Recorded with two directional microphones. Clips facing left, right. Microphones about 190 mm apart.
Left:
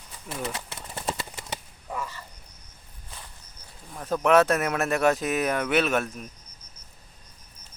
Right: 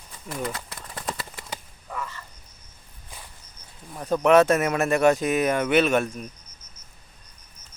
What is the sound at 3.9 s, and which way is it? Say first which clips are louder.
Speech: right 3 dB; 5° right (ahead or behind).